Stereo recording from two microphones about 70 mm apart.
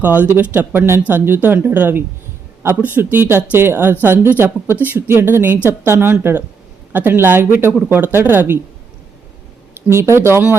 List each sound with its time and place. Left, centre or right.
0.0 s speech: right
9.7 s speech: right